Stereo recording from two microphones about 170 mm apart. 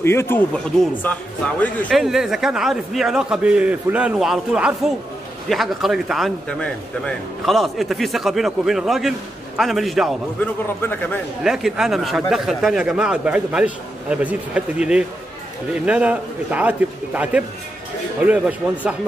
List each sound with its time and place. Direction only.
0.0 s a man's voice: 15° left (ahead or behind)
2.0 s a man's voice: centre (ahead or behind)
10.4 s a man's voice: 10° left (ahead or behind)
11.4 s a man's voice: centre (ahead or behind)